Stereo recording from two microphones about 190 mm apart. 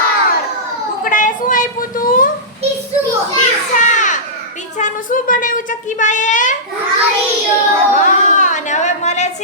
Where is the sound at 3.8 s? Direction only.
40° left (ahead or behind).